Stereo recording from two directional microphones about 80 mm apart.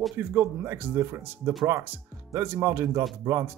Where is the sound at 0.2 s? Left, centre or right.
Right.